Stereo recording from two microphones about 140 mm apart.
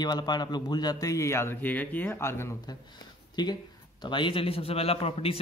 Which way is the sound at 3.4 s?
30° left (ahead or behind).